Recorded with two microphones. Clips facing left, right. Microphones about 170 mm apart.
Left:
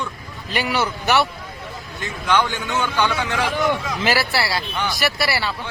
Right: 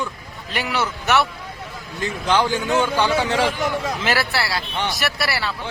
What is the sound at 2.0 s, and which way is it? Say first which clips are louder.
A man's voice: right 1 dB; 30° right (ahead or behind).